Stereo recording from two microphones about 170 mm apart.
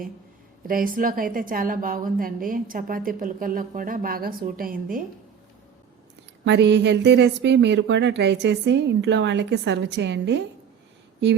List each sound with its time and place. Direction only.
0.7 s a woman's voice: 55° right (ahead or behind)
6.4 s speech: 90° right